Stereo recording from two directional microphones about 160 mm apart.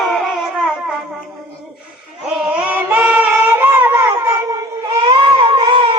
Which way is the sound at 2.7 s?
10° right (ahead or behind).